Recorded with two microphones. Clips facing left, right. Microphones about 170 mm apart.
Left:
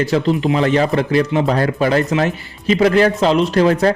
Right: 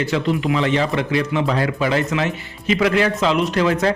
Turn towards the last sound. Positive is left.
turn(degrees=35)  # may be behind; listen again after turning